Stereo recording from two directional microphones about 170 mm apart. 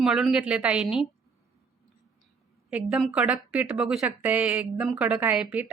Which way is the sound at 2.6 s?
5° right (ahead or behind).